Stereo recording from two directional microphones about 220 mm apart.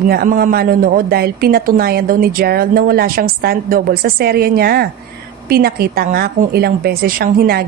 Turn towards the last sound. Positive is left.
turn(degrees=-45)  # may be behind; listen again after turning